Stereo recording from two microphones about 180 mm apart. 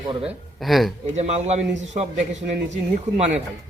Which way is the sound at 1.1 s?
35° right (ahead or behind).